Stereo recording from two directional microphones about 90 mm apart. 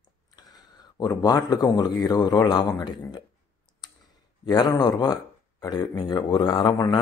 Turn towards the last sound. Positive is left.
turn(degrees=60)  # may be behind; listen again after turning